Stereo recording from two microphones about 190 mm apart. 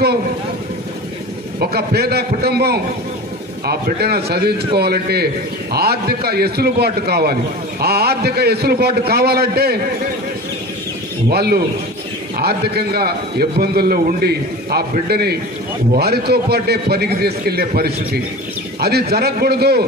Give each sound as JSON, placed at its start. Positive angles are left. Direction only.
{"t": 1.6, "sound": "a man's voice", "side_deg": -55}
{"t": 11.2, "sound": "a man's voice", "side_deg": -55}